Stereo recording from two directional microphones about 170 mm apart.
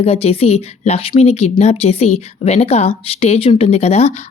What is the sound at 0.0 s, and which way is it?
Speech, 35° left (ahead or behind).